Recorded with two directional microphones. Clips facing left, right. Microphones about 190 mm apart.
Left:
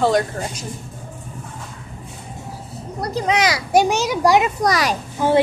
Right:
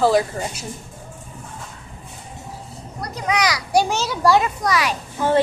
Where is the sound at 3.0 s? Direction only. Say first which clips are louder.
Left 3 dB; 30° left (ahead or behind).